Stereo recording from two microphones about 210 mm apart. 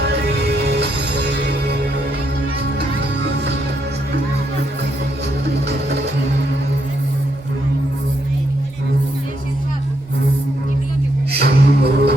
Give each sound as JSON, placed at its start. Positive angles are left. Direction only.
{"t": 0.0, "sound": "music", "side_deg": -55}
{"t": 3.2, "sound": "music", "side_deg": -55}
{"t": 5.6, "sound": "music", "side_deg": -55}
{"t": 11.3, "sound": "music", "side_deg": -50}